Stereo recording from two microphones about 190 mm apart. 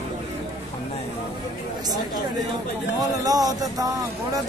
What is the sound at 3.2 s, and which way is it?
Speech, 20° right (ahead or behind).